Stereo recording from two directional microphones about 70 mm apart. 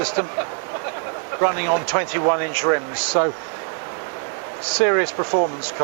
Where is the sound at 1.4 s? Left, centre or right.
Right.